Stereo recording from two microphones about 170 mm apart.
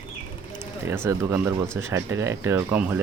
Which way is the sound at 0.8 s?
15° right (ahead or behind).